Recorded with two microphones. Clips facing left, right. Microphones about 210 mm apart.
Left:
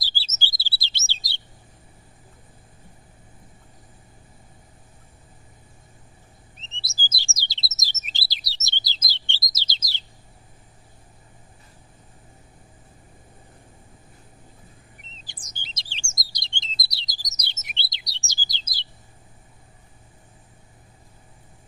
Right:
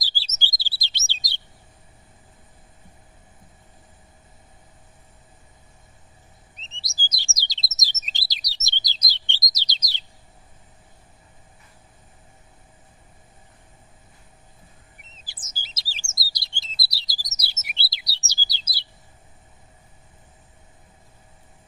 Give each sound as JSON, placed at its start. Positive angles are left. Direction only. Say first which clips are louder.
{"t": 0.0, "sound": "chirp", "louder": "even", "side_deg": -15}
{"t": 6.8, "sound": "bird", "louder": "left 1 dB", "side_deg": -15}
{"t": 8.3, "sound": "chirp", "louder": "even", "side_deg": -15}
{"t": 15.2, "sound": "chirp", "louder": "right 2 dB", "side_deg": -5}
{"t": 16.3, "sound": "bird", "louder": "left 2 dB", "side_deg": -5}
{"t": 17.1, "sound": "chirp", "louder": "right 1 dB", "side_deg": -5}